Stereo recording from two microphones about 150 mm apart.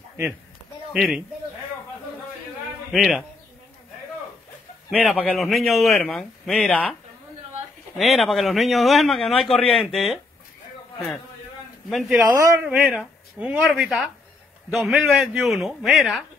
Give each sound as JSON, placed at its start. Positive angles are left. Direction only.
{"t": 0.9, "sound": "a man's voice", "side_deg": -5}
{"t": 2.9, "sound": "a man's voice", "side_deg": 0}
{"t": 5.2, "sound": "a man's voice", "side_deg": 0}
{"t": 8.0, "sound": "a man's voice", "side_deg": 0}
{"t": 11.9, "sound": "a man's voice", "side_deg": 0}
{"t": 12.2, "sound": "a man's voice", "side_deg": -15}
{"t": 12.5, "sound": "a man's voice", "side_deg": -5}